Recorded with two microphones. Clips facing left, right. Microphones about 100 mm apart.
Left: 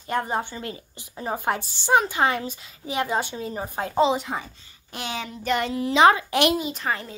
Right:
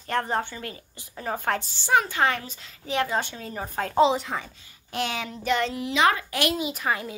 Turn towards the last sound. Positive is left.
turn(degrees=-10)  # may be behind; listen again after turning